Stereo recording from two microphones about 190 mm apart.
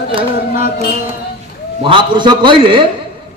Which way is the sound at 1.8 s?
25° right (ahead or behind).